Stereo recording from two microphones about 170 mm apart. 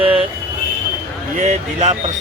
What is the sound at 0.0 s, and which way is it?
Vehicle, 35° right (ahead or behind).